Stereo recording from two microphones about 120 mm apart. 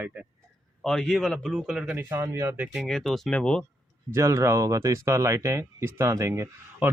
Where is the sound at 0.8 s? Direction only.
5° left (ahead or behind).